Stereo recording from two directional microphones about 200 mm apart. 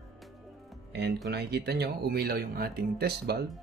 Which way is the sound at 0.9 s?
55° right (ahead or behind).